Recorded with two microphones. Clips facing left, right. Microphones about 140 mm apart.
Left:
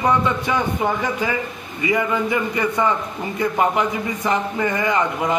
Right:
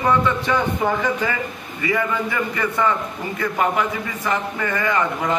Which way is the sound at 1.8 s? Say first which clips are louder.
Left 2 dB; 20° left (ahead or behind).